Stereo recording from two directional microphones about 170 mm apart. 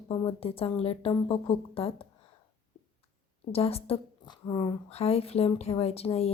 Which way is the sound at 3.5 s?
35° left (ahead or behind).